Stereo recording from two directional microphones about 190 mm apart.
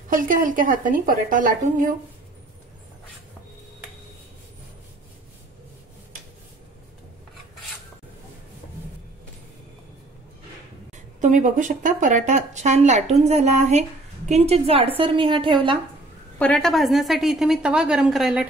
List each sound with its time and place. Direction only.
0.1 s a woman's voice: 45° right (ahead or behind)
11.1 s a woman's voice: 40° right (ahead or behind)
16.3 s a woman's voice: 5° left (ahead or behind)